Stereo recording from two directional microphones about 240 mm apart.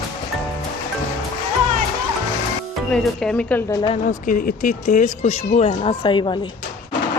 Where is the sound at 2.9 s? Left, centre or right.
Centre.